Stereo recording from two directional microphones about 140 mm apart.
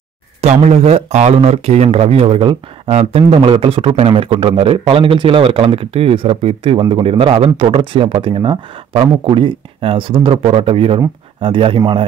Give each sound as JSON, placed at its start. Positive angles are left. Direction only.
{"t": 0.4, "sound": "a man's voice", "side_deg": -50}